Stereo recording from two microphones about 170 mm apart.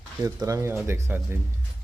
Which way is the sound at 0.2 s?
20° right (ahead or behind).